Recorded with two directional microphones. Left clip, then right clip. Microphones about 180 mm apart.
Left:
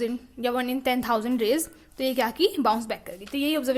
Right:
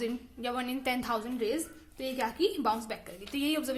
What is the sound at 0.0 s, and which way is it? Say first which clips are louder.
A woman's voice: left 7 dB; 30° left (ahead or behind).